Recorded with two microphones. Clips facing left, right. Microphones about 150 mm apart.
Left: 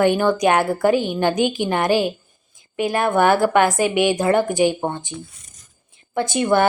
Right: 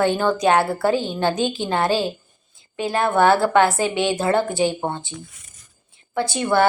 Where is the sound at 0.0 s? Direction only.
15° left (ahead or behind).